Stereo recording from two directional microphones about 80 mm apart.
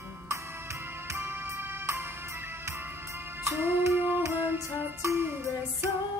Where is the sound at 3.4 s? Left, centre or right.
Right.